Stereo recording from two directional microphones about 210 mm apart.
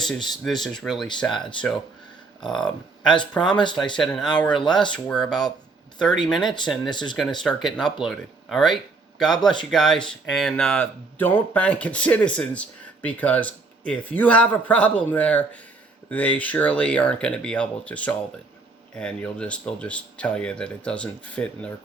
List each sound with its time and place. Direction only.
0.0 s speech: centre (ahead or behind)
2.5 s speech: 5° left (ahead or behind)
6.4 s speech: 20° left (ahead or behind)
7.4 s speech: centre (ahead or behind)